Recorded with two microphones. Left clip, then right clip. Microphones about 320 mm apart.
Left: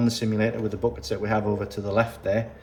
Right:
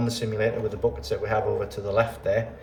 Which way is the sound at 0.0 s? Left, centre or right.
Left.